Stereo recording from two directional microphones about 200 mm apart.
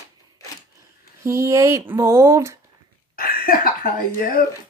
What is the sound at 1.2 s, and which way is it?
Speech, 15° right (ahead or behind).